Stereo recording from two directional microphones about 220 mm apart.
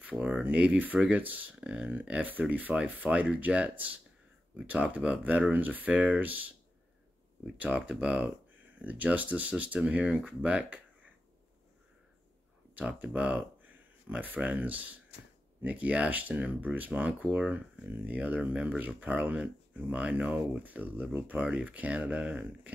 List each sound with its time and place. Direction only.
0.0 s speech: 5° right (ahead or behind)
7.5 s speech: 5° right (ahead or behind)
12.7 s speech: 5° right (ahead or behind)